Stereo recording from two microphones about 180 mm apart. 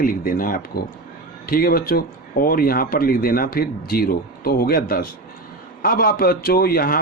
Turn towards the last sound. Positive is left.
turn(degrees=55)  # may be behind; listen again after turning